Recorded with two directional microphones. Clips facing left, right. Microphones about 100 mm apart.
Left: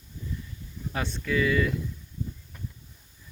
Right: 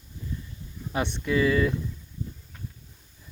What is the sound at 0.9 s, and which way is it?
Speech, 25° right (ahead or behind).